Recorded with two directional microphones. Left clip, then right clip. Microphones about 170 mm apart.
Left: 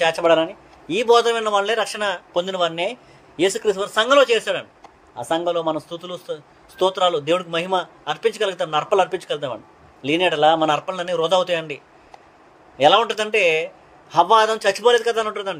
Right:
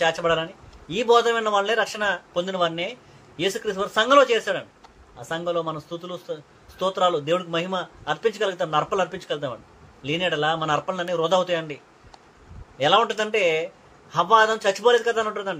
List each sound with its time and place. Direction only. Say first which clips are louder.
0.0 s a man's voice: left 5 dB; 45° left (ahead or behind)